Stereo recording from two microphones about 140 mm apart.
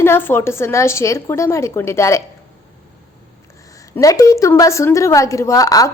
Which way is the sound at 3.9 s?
25° left (ahead or behind).